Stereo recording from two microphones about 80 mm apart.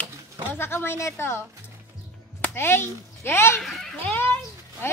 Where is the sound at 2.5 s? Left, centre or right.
Left.